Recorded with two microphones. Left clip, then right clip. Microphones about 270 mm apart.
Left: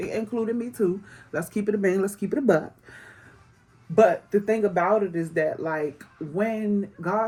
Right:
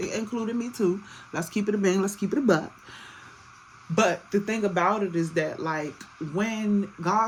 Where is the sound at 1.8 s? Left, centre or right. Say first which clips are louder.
Even; right.